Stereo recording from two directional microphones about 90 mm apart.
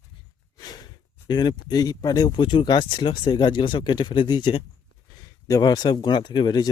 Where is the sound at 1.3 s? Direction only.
55° left (ahead or behind).